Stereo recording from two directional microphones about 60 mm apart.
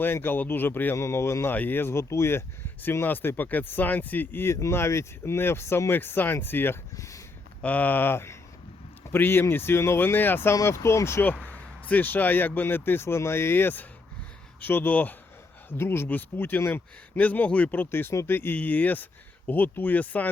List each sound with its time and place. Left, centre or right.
0.0 s speech: left
0.9 s speech: left
1.5 s speech: left
2.8 s speech: left
4.7 s speech: left
6.9 s speech: left
7.6 s speech: left
10.7 s speech: left
11.2 s speech: left
15.8 s speech: left
16.0 s speech: left
17.2 s speech: left
18.5 s speech: left